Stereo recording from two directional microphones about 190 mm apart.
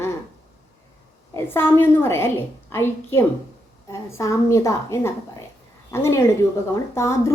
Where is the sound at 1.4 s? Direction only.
10° left (ahead or behind).